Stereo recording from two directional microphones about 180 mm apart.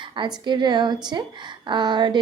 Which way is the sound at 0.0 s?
25° right (ahead or behind).